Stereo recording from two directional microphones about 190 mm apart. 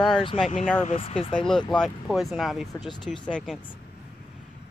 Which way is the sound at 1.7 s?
Centre (ahead or behind).